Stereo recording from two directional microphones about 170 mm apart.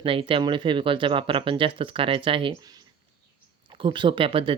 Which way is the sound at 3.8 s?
30° right (ahead or behind).